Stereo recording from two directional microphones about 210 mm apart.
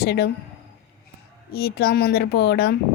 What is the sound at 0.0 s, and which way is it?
Speech, 50° left (ahead or behind).